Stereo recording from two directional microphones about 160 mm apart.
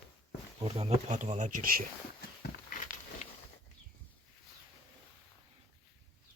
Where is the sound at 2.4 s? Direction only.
55° left (ahead or behind).